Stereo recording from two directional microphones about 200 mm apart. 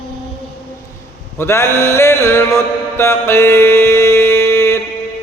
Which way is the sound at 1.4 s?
15° left (ahead or behind).